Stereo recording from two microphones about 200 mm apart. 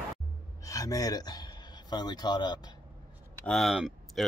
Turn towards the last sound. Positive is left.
turn(degrees=0)  # may be behind; listen again after turning